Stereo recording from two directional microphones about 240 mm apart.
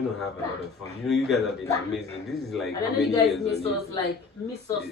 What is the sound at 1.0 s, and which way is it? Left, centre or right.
A man's voice, centre.